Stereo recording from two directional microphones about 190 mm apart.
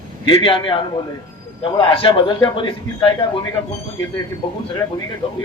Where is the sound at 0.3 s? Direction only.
25° left (ahead or behind).